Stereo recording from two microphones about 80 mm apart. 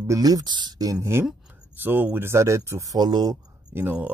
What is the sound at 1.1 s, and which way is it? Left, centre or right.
Speech, right.